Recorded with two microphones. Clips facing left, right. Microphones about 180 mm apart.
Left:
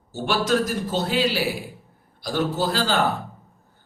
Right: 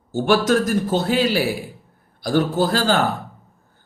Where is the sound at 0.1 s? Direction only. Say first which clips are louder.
Right 5 dB; 50° right (ahead or behind).